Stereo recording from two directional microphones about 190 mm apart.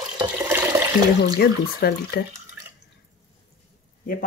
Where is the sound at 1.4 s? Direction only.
55° left (ahead or behind).